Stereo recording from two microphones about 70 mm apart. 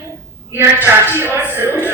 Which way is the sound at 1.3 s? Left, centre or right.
Right.